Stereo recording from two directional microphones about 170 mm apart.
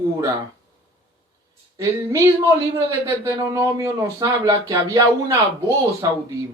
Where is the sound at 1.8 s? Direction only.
15° right (ahead or behind).